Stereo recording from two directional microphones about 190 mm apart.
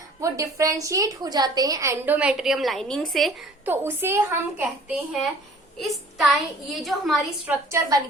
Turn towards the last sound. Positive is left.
turn(degrees=-15)  # may be behind; listen again after turning